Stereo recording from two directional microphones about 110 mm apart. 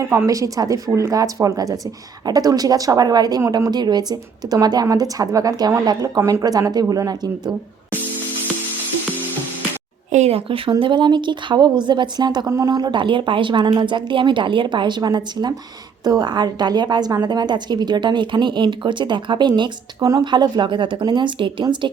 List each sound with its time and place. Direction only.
0.0 s speech: 25° right (ahead or behind)
10.1 s a woman's voice: 80° right; by 21.8 s 45° right (ahead or behind)